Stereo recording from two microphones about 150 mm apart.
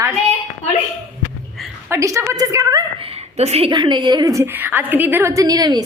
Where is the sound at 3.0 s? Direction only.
40° right (ahead or behind).